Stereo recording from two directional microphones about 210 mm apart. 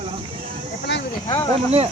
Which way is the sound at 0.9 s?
55° left (ahead or behind).